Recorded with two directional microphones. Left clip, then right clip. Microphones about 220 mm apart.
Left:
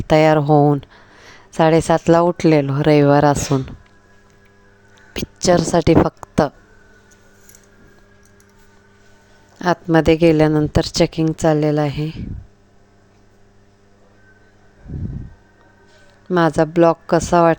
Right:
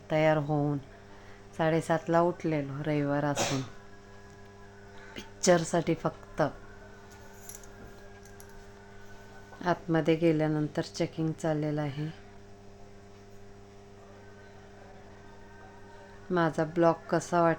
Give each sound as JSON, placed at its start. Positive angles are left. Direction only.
{"t": 0.1, "sound": "speech", "side_deg": 45}
{"t": 5.1, "sound": "a woman's voice", "side_deg": 40}
{"t": 9.6, "sound": "speech", "side_deg": 40}
{"t": 16.3, "sound": "a woman's voice", "side_deg": 35}